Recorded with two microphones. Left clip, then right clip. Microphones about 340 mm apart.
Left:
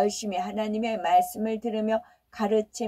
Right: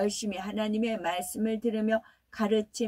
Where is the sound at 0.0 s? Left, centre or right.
Centre.